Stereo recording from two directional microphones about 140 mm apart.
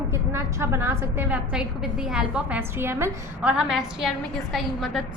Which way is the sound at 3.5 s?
5° right (ahead or behind).